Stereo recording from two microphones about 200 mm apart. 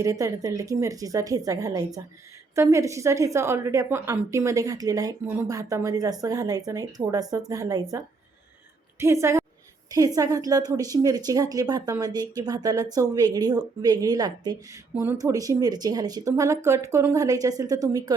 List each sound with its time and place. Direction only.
0.0 s a woman's voice: 15° right (ahead or behind)